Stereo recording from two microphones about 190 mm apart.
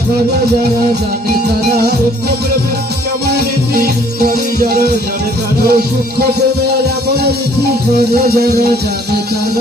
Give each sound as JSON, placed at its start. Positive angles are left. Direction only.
{"t": 3.3, "sound": "music", "side_deg": -55}
{"t": 5.6, "sound": "music", "side_deg": -55}
{"t": 8.3, "sound": "music", "side_deg": -55}